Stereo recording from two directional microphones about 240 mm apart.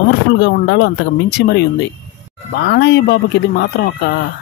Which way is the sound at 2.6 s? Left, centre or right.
Left.